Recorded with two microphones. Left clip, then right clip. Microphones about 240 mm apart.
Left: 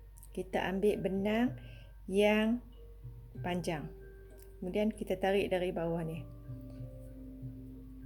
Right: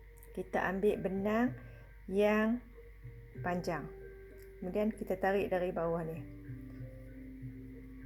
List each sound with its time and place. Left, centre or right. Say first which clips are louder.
0.3 s a woman's voice: even; left